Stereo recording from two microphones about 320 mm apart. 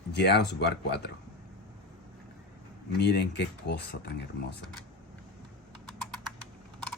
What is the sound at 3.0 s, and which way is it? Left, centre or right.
Speech, left.